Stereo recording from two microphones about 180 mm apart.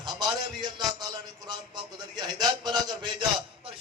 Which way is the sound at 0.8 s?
20° right (ahead or behind).